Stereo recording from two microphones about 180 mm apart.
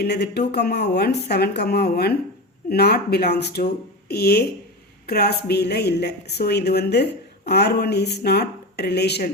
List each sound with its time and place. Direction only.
0.0 s a woman's voice: 65° left (ahead or behind)